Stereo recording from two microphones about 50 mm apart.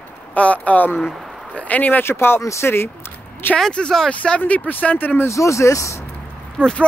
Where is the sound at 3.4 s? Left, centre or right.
Left.